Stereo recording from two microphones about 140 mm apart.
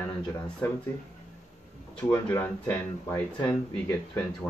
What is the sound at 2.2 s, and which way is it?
A man's voice, 15° left (ahead or behind).